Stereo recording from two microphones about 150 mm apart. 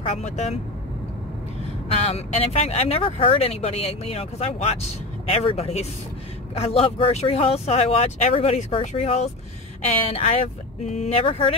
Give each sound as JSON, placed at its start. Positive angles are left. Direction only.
{"t": 0.1, "sound": "speech", "side_deg": 45}
{"t": 2.0, "sound": "speech", "side_deg": 40}